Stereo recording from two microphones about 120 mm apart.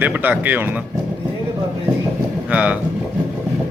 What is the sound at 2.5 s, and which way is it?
Speech, 10° right (ahead or behind).